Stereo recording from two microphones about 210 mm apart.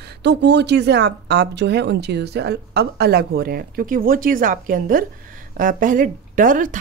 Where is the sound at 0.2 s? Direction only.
55° right (ahead or behind).